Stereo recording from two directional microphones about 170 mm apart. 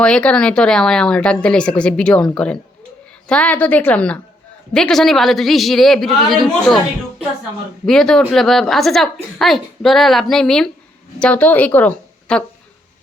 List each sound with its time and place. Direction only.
0.0 s a woman's voice: 5° left (ahead or behind)